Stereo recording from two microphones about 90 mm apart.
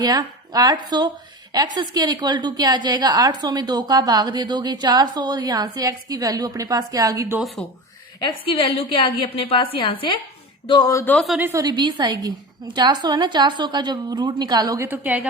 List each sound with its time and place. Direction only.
0.0 s a woman's voice: 45° right (ahead or behind)
8.2 s a woman's voice: 80° left; by 10.2 s 65° left (ahead or behind)
10.8 s speech: 45° left (ahead or behind)
11.5 s a woman's voice: 50° right (ahead or behind)
14.8 s a woman's voice: 20° right (ahead or behind)